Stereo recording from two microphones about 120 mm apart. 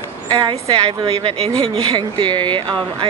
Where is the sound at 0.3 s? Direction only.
40° right (ahead or behind).